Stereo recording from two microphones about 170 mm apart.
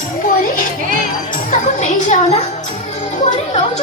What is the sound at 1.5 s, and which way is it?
Music, 45° left (ahead or behind).